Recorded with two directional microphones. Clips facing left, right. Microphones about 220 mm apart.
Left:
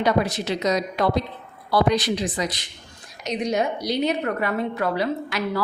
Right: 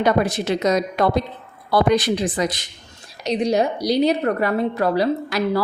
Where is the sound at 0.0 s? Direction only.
50° right (ahead or behind).